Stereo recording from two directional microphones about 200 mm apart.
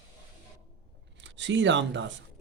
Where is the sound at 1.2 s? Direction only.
65° right (ahead or behind).